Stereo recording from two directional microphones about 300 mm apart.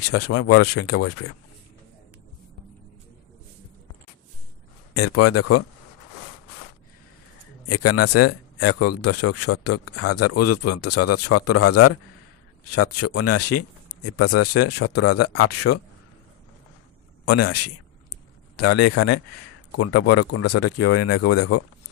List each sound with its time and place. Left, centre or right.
0.1 s speech: left
4.9 s speech: left
7.6 s speech: left
17.3 s speech: left